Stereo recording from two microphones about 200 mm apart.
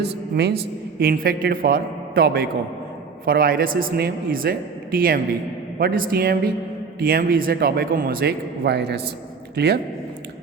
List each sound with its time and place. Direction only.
0.0 s a man's voice: 55° right (ahead or behind)